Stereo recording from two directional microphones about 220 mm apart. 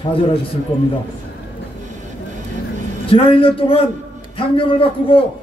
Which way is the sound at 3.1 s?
25° left (ahead or behind).